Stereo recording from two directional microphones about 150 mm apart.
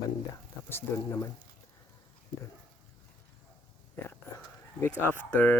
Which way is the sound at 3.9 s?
15° left (ahead or behind).